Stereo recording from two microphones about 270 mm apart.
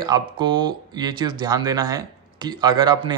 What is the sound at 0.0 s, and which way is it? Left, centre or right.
Speech, centre.